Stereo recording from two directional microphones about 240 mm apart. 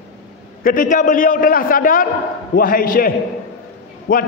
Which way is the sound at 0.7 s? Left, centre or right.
Left.